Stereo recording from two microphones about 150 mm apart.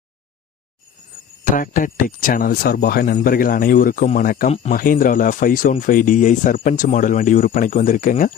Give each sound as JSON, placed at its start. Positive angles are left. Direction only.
{"t": 1.5, "sound": "speech", "side_deg": 65}
{"t": 3.2, "sound": "speech", "side_deg": 70}
{"t": 4.4, "sound": "speech", "side_deg": 45}
{"t": 4.7, "sound": "speech", "side_deg": 70}